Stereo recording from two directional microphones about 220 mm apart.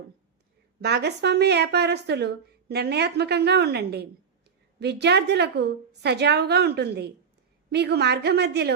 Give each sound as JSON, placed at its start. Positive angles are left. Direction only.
{"t": 0.8, "sound": "a woman's voice", "side_deg": -50}